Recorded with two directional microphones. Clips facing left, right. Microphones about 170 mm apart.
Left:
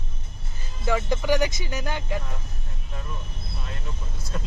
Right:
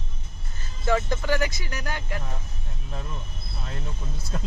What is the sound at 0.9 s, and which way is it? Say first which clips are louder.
Speech: left 1 dB; 10° left (ahead or behind).